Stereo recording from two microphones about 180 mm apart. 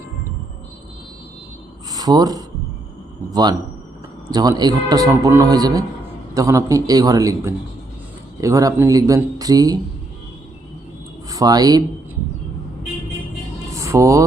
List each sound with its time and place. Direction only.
1.9 s speech: 20° right (ahead or behind)
4.3 s a man's voice: 20° right (ahead or behind)
11.3 s speech: 20° right (ahead or behind)
13.7 s speech: 15° right (ahead or behind)